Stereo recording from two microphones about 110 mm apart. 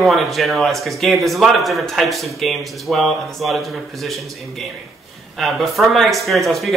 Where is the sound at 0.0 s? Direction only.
Centre (ahead or behind).